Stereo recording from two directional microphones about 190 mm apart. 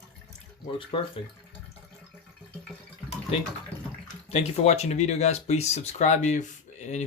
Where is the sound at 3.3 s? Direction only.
30° left (ahead or behind).